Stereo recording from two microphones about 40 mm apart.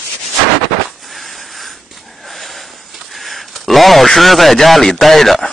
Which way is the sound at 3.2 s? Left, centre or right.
Centre.